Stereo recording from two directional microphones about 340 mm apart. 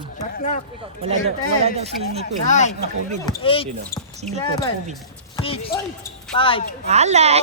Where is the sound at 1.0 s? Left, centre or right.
Centre.